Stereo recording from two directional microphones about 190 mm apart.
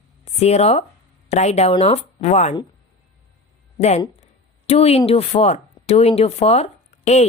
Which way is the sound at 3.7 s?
35° left (ahead or behind).